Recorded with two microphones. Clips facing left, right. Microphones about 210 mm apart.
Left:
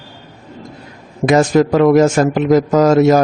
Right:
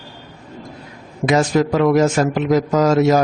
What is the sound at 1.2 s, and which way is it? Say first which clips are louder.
A man's voice: left 4 dB; 50° left (ahead or behind).